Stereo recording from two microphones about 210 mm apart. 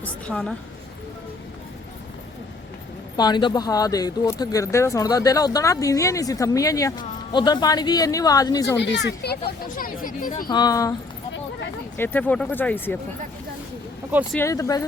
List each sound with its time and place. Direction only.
0.0 s a woman's voice: 5° left (ahead or behind)
3.2 s speech: 20° left (ahead or behind)
8.8 s speech: 55° left (ahead or behind)
10.5 s speech: 20° left (ahead or behind)
11.9 s speech: 10° left (ahead or behind)
14.3 s speech: 15° left (ahead or behind)